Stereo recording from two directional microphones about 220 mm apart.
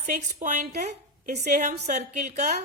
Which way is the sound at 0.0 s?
35° right (ahead or behind).